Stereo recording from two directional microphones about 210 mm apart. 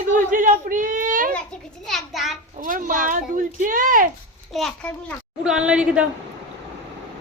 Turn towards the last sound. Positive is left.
turn(degrees=-5)  # may be behind; listen again after turning